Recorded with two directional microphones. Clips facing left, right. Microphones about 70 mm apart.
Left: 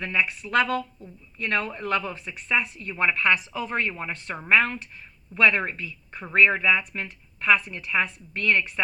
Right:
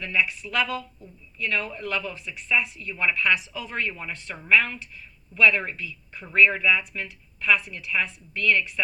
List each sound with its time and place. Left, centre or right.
0.0 s speech: left